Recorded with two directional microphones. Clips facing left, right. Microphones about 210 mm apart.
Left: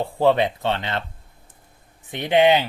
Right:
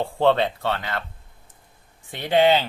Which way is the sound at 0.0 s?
10° left (ahead or behind).